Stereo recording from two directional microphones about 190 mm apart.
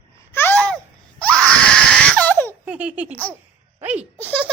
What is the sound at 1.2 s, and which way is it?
Baby cry, 5° left (ahead or behind).